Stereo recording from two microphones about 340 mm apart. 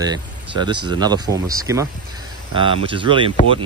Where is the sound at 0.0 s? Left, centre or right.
Centre.